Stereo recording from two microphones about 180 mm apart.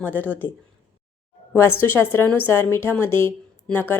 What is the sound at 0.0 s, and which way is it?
Speech, 10° left (ahead or behind).